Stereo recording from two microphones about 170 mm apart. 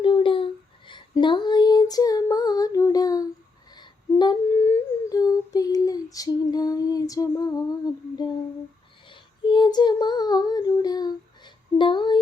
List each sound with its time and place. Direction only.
0.0 s a sound: 30° left (ahead or behind)
0.9 s female singing: 30° left (ahead or behind)
3.7 s humming: 25° left (ahead or behind)
9.0 s child singing: 30° left (ahead or behind)